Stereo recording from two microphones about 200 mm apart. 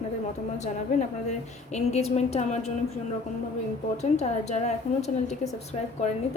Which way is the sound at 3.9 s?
35° left (ahead or behind).